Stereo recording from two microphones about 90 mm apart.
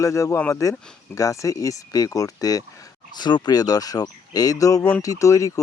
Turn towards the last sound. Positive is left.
turn(degrees=35)  # may be behind; listen again after turning